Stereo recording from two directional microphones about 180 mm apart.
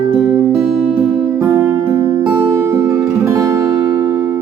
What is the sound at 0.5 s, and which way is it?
Music, centre (ahead or behind).